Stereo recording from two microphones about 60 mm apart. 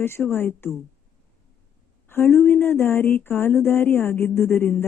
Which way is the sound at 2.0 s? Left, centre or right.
Left.